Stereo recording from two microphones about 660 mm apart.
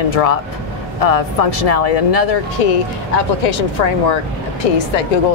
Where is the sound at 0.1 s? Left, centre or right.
Left.